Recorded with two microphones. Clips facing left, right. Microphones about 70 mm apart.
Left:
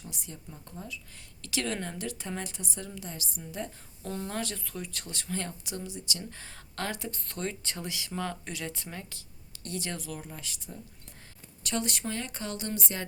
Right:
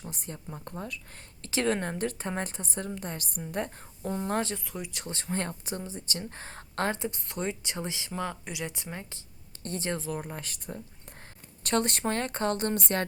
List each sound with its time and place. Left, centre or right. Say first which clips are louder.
0.0 s speech: right 4 dB; right
1.4 s speech: right 5 dB; right
4.0 s speech: right 4 dB; right
4.3 s speech: right 7 dB; right
4.5 s speech: right 2 dB; centre
5.0 s speech: right 5 dB; right
8.1 s speech: even; centre; by 10.2 s right
10.2 s speech: right 5 dB; right